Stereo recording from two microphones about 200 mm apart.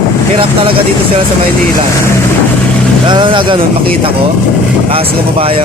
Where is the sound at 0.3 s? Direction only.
25° right (ahead or behind).